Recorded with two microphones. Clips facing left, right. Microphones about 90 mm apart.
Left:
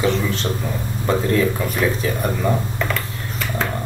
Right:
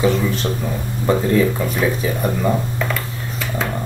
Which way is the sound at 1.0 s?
15° right (ahead or behind).